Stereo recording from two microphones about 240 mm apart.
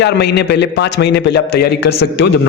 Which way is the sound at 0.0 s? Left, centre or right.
Left.